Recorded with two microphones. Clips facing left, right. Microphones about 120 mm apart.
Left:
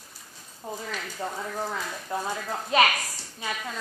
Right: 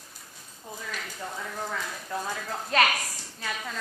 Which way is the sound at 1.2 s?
35° left (ahead or behind).